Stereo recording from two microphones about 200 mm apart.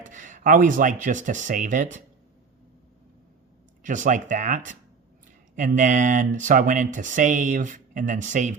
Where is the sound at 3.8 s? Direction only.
40° right (ahead or behind).